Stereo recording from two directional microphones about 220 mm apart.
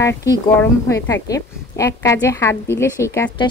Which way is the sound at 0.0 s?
15° left (ahead or behind).